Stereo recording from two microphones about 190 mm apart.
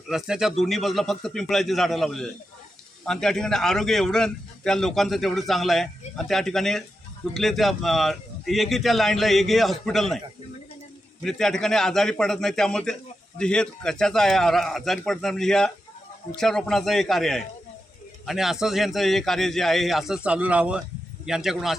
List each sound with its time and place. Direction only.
0.1 s a man's voice: centre (ahead or behind)
11.2 s a man's voice: centre (ahead or behind)